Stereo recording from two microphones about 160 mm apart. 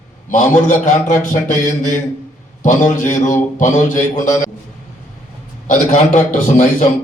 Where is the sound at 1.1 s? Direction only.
55° left (ahead or behind).